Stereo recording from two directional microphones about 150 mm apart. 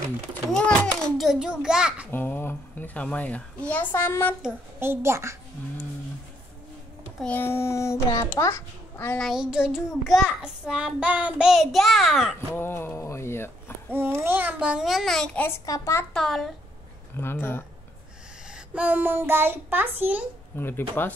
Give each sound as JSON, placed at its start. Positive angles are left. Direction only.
{"t": 0.5, "sound": "a sound", "side_deg": 5}
{"t": 2.0, "sound": "a child's voice", "side_deg": 10}
{"t": 4.7, "sound": "a child's voice", "side_deg": -15}
{"t": 7.2, "sound": "a child's voice", "side_deg": 10}
{"t": 9.2, "sound": "child singing", "side_deg": 0}
{"t": 12.5, "sound": "speech", "side_deg": 15}
{"t": 13.9, "sound": "child singing", "side_deg": -15}
{"t": 16.1, "sound": "child singing", "side_deg": 5}
{"t": 17.2, "sound": "a child's voice", "side_deg": 15}
{"t": 18.5, "sound": "a child's voice", "side_deg": -10}
{"t": 20.5, "sound": "a child's voice", "side_deg": 15}